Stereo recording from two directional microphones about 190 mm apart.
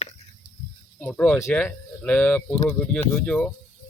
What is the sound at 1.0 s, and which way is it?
Speech, 10° left (ahead or behind).